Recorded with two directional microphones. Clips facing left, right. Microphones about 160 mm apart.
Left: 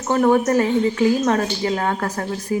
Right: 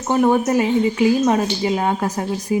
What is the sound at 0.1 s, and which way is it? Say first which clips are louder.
Speech: even; 15° right (ahead or behind).